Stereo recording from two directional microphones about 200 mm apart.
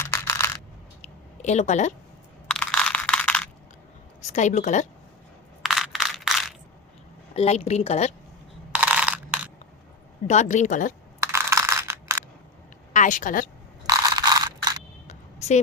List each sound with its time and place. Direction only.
0.0 s coin: 10° left (ahead or behind)
1.0 s a sound: 35° left (ahead or behind)
2.5 s crushing: 5° left (ahead or behind)
4.3 s a woman's voice: 35° left (ahead or behind)
5.6 s crushing: centre (ahead or behind)
7.3 s a woman's voice: 30° left (ahead or behind)
8.7 s crushing: 5° right (ahead or behind)
10.2 s a woman's voice: 35° left (ahead or behind)
11.2 s a sound: 15° right (ahead or behind)
12.9 s a woman's voice: 40° left (ahead or behind)
13.8 s crushing: 20° right (ahead or behind)
15.0 s a sound: 35° left (ahead or behind)